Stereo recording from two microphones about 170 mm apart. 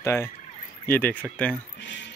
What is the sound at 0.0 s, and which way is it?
Speech, 15° left (ahead or behind).